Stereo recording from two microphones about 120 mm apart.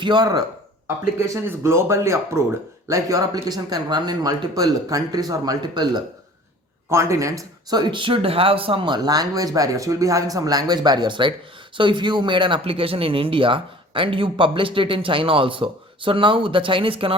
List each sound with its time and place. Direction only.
0.0 s speech: 40° right (ahead or behind)
1.3 s speech: 20° right (ahead or behind)
6.9 s speech: 25° right (ahead or behind); by 17.2 s 50° right (ahead or behind)